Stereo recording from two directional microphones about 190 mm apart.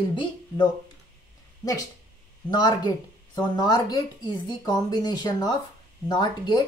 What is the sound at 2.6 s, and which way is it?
Speech, 25° left (ahead or behind).